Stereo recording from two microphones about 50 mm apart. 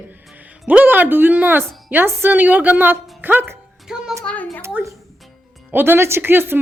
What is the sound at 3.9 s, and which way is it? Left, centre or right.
Music, centre.